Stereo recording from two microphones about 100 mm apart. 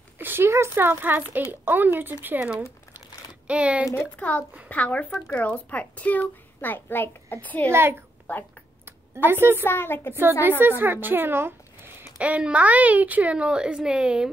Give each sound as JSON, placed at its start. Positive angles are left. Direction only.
{"t": 0.2, "sound": "speech", "side_deg": -20}
{"t": 4.2, "sound": "a child's voice", "side_deg": 15}
{"t": 7.7, "sound": "speech", "side_deg": -25}
{"t": 8.3, "sound": "a child's voice", "side_deg": 15}
{"t": 8.8, "sound": "a sound", "side_deg": -20}
{"t": 9.7, "sound": "a woman's voice", "side_deg": 20}
{"t": 10.6, "sound": "speech", "side_deg": -20}